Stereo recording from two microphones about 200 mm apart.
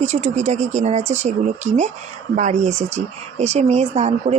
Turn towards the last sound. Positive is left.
turn(degrees=-35)  # may be behind; listen again after turning